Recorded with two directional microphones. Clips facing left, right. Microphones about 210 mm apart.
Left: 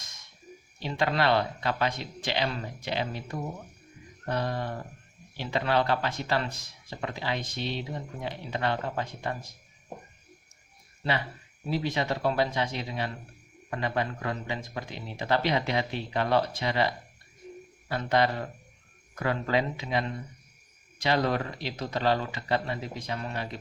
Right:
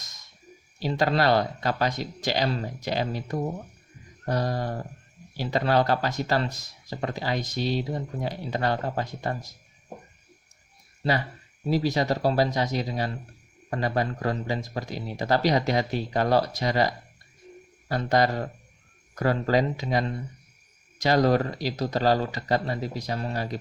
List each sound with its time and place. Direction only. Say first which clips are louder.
0.8 s speech: right 4 dB; 40° right (ahead or behind)
11.7 s speech: right 5 dB; 40° right (ahead or behind)